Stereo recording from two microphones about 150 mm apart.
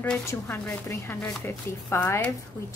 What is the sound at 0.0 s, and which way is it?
A woman's voice, 15° left (ahead or behind).